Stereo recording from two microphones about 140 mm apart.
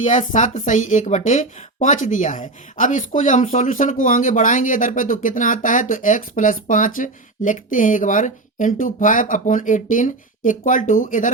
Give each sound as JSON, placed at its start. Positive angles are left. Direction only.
{"t": 0.0, "sound": "a woman's voice", "side_deg": 65}